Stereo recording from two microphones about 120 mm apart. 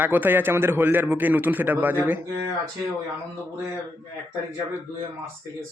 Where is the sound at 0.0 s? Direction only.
15° right (ahead or behind).